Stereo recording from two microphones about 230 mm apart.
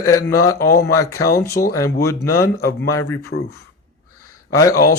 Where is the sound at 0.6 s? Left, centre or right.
Left.